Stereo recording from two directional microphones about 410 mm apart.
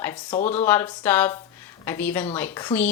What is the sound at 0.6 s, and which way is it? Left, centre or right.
Speech, centre.